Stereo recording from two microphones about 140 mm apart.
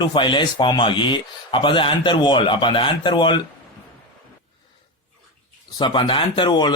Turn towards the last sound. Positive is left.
turn(degrees=35)  # may be behind; listen again after turning